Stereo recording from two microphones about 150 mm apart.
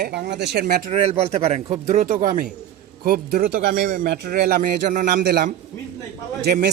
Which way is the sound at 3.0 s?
80° right.